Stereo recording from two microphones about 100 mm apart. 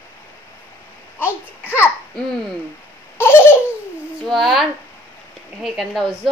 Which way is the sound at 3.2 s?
25° left (ahead or behind).